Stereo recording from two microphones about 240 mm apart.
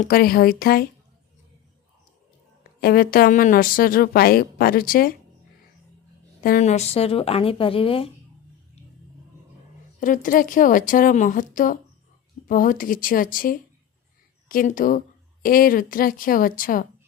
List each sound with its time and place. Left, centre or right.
0.0 s a woman's voice: left
2.8 s a woman's voice: left
6.4 s speech: left
10.0 s a woman's voice: left